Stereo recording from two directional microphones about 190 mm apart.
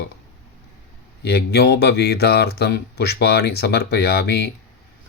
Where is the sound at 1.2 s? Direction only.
55° left (ahead or behind).